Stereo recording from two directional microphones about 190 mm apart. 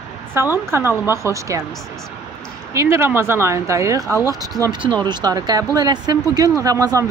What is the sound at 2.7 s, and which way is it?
Speech, 15° right (ahead or behind).